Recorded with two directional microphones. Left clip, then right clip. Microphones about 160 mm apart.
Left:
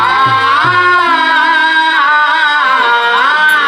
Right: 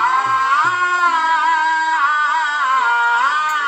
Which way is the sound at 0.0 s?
35° right (ahead or behind).